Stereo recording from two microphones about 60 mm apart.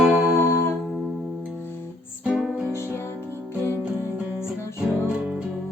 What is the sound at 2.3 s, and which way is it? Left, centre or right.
Music, centre.